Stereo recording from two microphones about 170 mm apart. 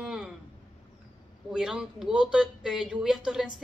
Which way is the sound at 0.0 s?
5° right (ahead or behind).